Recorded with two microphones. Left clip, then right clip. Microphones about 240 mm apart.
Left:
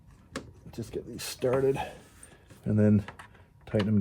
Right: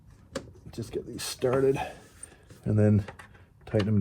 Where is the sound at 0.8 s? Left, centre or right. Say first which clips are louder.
Right 2 dB; right.